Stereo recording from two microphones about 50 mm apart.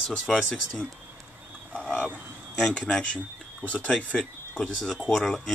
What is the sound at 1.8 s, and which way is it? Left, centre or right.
Vehicle, left.